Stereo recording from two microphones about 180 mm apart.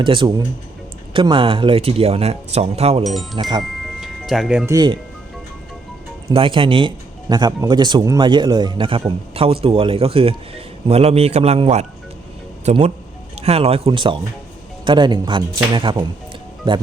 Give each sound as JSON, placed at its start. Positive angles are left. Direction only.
{"t": 0.0, "sound": "a man's voice", "side_deg": -25}
{"t": 3.0, "sound": "speech", "side_deg": 0}
{"t": 4.0, "sound": "music", "side_deg": 0}
{"t": 4.6, "sound": "a man's voice", "side_deg": -20}
{"t": 6.3, "sound": "a man's voice", "side_deg": -30}